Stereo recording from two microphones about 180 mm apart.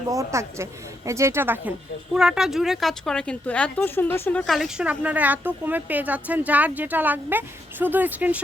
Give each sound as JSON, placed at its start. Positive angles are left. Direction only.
{"t": 0.1, "sound": "speech", "side_deg": -15}